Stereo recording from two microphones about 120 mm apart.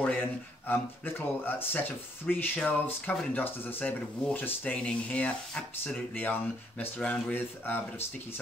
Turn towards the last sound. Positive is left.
turn(degrees=15)  # may be behind; listen again after turning